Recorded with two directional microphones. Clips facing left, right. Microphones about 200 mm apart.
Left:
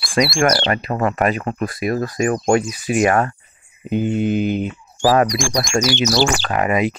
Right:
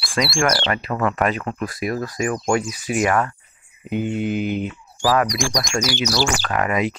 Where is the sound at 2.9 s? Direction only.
25° left (ahead or behind).